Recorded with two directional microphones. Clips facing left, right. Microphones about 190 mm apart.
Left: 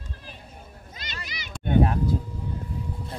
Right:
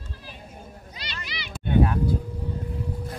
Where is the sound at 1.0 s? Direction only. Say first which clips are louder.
Right 1 dB; 45° left (ahead or behind).